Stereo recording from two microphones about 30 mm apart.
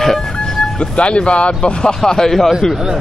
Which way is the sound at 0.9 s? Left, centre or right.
Left.